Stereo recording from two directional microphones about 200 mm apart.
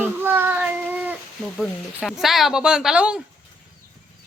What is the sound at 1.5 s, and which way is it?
Speech, centre (ahead or behind).